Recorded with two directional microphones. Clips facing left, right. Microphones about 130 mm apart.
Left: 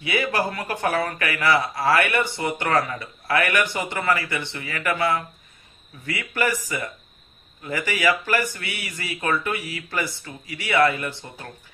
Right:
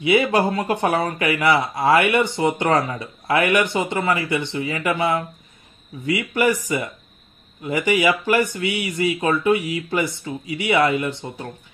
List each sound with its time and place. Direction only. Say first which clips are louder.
0.0 s speech: right 7 dB; 20° right (ahead or behind)